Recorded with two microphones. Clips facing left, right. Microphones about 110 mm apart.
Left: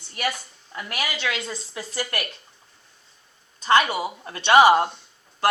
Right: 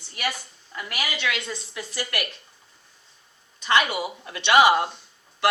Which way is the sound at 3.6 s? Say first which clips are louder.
Left 3 dB; 35° left (ahead or behind).